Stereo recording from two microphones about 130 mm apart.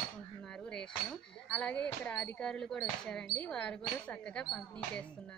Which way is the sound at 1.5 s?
10° left (ahead or behind).